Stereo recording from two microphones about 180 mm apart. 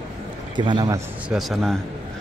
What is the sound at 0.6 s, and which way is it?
Speech, 25° right (ahead or behind).